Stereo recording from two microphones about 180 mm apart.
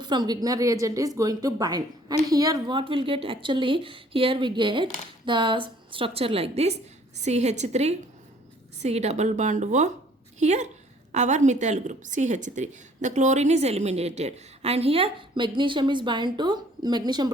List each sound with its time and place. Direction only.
0.0 s a woman's voice: 25° right (ahead or behind)